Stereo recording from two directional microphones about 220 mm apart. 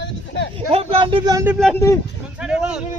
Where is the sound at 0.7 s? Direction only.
25° right (ahead or behind).